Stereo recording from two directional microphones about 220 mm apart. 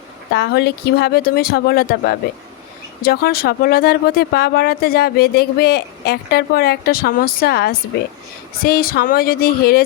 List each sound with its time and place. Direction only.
0.3 s speech: 50° left (ahead or behind)